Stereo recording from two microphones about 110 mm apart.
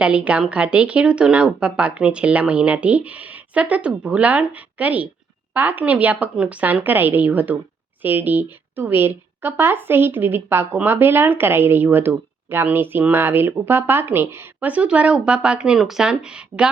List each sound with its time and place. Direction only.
0.0 s a woman's voice: 10° right (ahead or behind)